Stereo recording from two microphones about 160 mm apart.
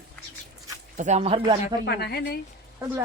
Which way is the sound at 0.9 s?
45° right (ahead or behind).